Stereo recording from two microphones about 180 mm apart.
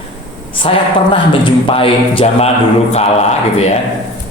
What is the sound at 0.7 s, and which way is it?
A man's voice, 30° left (ahead or behind).